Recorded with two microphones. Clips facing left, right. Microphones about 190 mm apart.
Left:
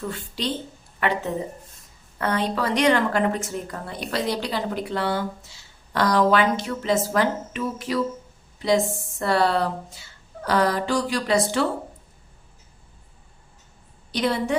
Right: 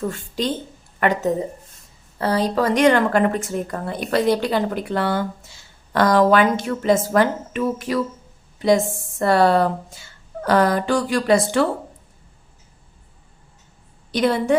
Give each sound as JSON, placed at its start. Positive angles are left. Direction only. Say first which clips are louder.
{"t": 0.0, "sound": "speech", "louder": "right 5 dB", "side_deg": -45}
{"t": 2.1, "sound": "speech", "louder": "right 5 dB", "side_deg": -35}
{"t": 14.1, "sound": "speech", "louder": "right 4 dB", "side_deg": -50}